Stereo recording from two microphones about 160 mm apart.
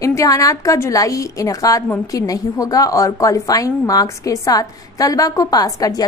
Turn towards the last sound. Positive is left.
turn(degrees=25)  # may be behind; listen again after turning